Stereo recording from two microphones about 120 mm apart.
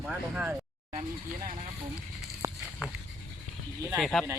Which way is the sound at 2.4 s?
25° right (ahead or behind).